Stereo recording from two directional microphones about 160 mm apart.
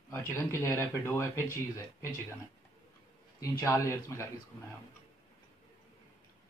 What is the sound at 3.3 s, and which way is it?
Speech, 20° left (ahead or behind).